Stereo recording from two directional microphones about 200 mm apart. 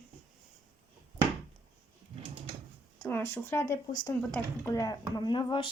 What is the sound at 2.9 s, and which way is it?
Speech, 10° left (ahead or behind).